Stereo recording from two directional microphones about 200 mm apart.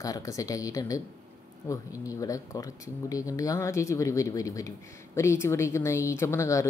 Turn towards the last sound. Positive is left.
turn(degrees=15)  # may be behind; listen again after turning